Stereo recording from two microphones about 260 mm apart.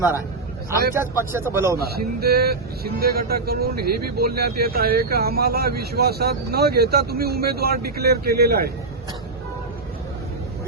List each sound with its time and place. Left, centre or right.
0.9 s a man's voice: centre
1.8 s speech: right